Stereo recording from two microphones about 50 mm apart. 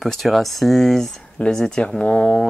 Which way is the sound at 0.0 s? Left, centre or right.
Centre.